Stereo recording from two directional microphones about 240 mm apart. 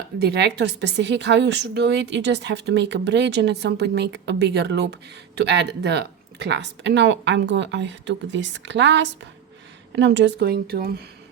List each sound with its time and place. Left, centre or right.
0.2 s speech: right